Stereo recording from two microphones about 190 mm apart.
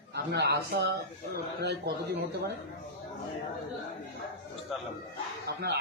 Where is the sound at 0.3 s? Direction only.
60° right (ahead or behind).